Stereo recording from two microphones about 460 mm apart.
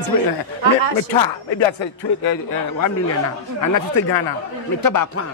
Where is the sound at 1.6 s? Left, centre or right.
Left.